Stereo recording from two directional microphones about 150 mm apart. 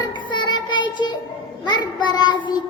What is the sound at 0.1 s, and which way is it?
Child singing, 30° left (ahead or behind).